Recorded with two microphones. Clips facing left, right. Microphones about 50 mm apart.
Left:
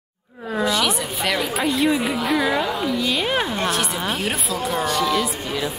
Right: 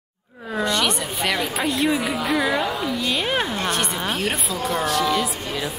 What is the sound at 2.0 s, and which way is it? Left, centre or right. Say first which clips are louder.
A woman's voice: left 1 dB; centre.